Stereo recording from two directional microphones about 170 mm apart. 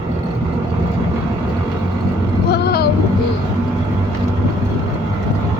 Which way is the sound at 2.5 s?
70° left (ahead or behind).